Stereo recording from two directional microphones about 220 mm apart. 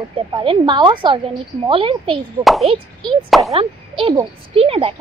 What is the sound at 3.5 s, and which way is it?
Speech, 25° right (ahead or behind).